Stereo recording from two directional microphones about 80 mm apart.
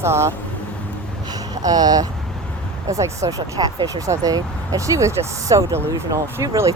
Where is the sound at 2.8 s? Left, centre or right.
Right.